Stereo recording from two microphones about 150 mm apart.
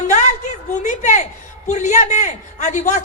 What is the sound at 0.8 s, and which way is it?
A man's voice, 55° left (ahead or behind).